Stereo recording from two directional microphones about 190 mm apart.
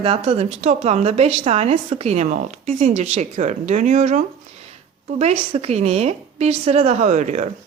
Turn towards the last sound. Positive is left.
turn(degrees=-40)  # may be behind; listen again after turning